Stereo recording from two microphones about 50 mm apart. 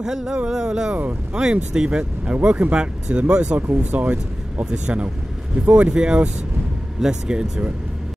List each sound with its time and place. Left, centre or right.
0.0 s speech: centre
3.9 s speech: right